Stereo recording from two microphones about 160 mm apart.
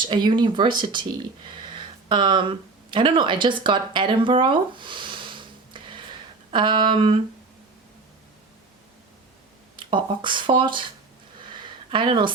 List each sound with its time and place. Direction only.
0.0 s speech: 30° right (ahead or behind)
9.7 s speech: 30° right (ahead or behind)
11.4 s a sound: 30° right (ahead or behind)